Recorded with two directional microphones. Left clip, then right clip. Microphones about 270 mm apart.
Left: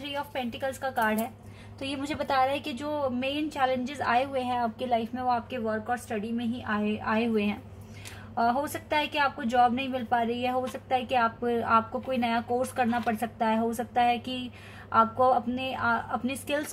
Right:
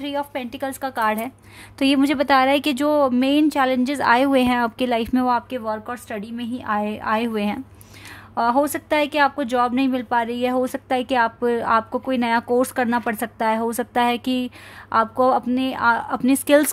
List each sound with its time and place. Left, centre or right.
0.0 s speech: right
6.6 s speech: right